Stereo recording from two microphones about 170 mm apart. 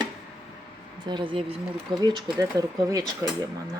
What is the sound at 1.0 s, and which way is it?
Speech, 30° right (ahead or behind).